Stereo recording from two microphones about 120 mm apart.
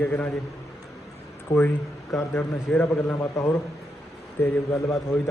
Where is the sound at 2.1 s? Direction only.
20° left (ahead or behind).